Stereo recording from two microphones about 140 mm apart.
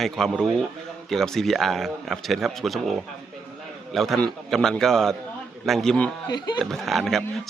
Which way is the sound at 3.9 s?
Centre (ahead or behind).